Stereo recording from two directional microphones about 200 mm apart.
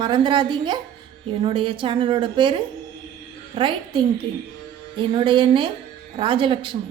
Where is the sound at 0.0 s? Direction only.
25° right (ahead or behind).